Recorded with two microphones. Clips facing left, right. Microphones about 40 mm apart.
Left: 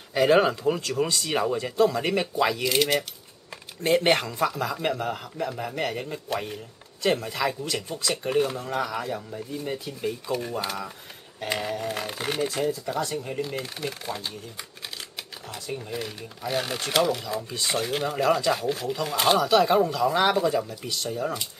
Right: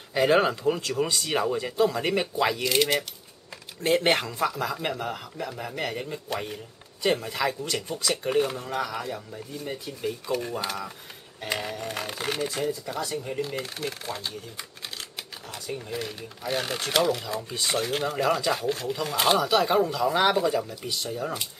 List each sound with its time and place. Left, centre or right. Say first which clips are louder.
0.1 s speech: left 2 dB; centre
15.5 s speech: even; centre